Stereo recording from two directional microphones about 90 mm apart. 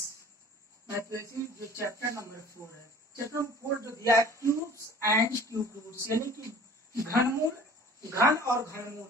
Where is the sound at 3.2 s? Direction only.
30° right (ahead or behind).